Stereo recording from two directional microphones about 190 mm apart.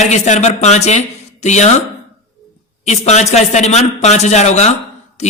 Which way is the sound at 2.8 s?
35° left (ahead or behind).